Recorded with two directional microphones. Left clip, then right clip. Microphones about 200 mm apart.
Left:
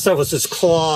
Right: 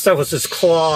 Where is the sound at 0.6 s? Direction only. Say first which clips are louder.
Right 1 dB; 25° left (ahead or behind).